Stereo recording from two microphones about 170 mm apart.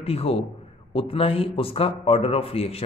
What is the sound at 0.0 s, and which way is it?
Speech, 35° left (ahead or behind).